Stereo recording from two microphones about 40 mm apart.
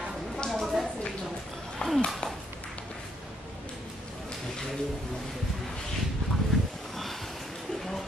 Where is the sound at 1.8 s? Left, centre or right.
Left.